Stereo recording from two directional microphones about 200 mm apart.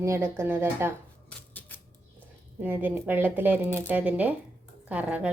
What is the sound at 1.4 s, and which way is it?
Typewriter, 10° left (ahead or behind).